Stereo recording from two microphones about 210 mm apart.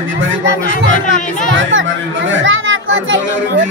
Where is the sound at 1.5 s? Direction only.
65° right (ahead or behind).